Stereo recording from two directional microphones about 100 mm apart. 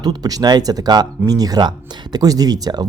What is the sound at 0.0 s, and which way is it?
Speech, 45° right (ahead or behind).